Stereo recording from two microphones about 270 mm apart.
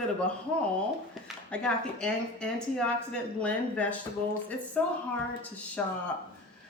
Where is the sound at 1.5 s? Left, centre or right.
Centre.